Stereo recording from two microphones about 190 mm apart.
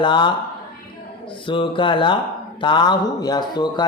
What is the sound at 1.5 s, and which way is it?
Speech, 25° left (ahead or behind).